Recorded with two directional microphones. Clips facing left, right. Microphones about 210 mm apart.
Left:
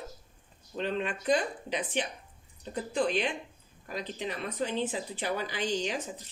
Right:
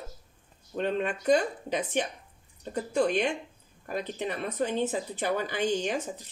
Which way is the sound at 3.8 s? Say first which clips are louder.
Right 4 dB; 50° right (ahead or behind).